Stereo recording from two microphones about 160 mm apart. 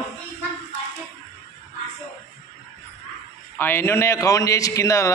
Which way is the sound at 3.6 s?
15° left (ahead or behind).